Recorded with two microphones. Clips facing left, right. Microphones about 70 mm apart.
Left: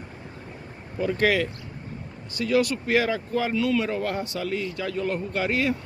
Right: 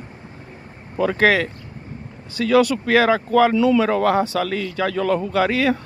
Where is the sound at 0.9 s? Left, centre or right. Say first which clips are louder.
Right 5 dB; right.